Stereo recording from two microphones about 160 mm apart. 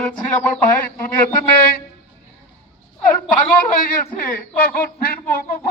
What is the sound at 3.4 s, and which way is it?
A man's voice, 60° left (ahead or behind).